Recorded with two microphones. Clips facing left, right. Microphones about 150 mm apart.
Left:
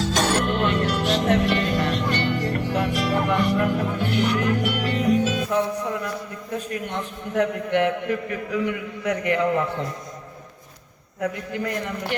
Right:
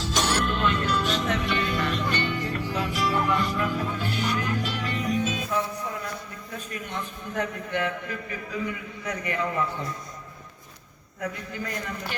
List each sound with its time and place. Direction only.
0.0 s music: 55° left (ahead or behind)
6.7 s a man's voice: 65° left (ahead or behind)
11.2 s a man's voice: 60° left (ahead or behind)